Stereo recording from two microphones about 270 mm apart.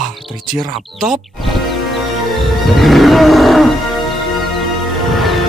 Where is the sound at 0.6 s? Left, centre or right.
Centre.